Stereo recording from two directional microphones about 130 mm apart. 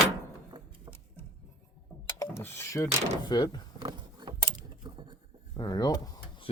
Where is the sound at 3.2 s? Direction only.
30° left (ahead or behind).